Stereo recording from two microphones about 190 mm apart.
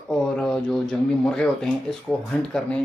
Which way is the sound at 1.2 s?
5° left (ahead or behind).